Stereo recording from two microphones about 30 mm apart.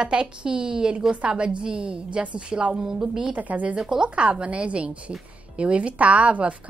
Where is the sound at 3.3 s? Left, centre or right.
Right.